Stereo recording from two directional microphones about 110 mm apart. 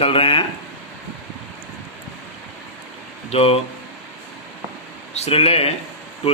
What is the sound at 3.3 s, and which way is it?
Speech, 65° left (ahead or behind).